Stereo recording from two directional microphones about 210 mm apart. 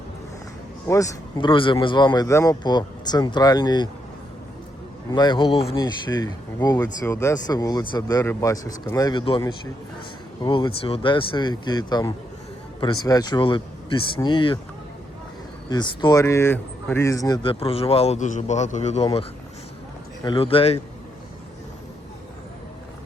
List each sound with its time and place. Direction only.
0.9 s speech: 15° left (ahead or behind)
5.1 s speech: 20° left (ahead or behind)
10.4 s speech: 25° left (ahead or behind)
15.7 s speech: 20° left (ahead or behind)
20.2 s speech: 25° left (ahead or behind)